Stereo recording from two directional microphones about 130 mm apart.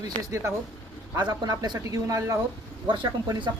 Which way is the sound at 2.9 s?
35° right (ahead or behind).